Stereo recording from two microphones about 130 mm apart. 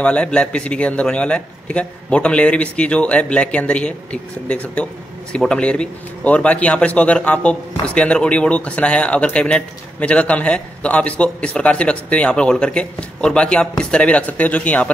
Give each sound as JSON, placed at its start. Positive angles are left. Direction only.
{"t": 0.0, "sound": "speech", "side_deg": 10}